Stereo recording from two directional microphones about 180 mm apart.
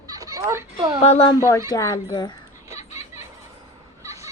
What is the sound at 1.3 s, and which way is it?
Speech, 15° left (ahead or behind).